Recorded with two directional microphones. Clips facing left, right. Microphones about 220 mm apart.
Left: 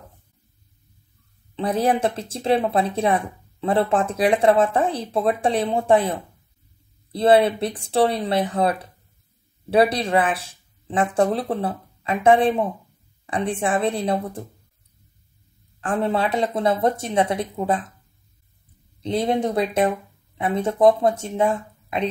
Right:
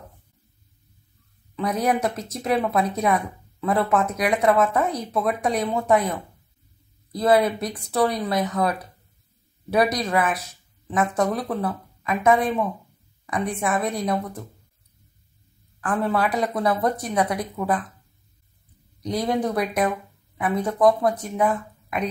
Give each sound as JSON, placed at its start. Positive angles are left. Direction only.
{"t": 1.5, "sound": "speech", "side_deg": 30}
{"t": 15.8, "sound": "speech", "side_deg": 25}
{"t": 18.9, "sound": "speech", "side_deg": 25}